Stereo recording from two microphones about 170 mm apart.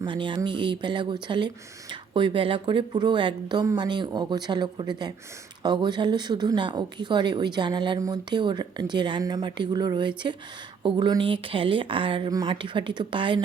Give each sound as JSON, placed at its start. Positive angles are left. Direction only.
{"t": 0.0, "sound": "speech", "side_deg": -30}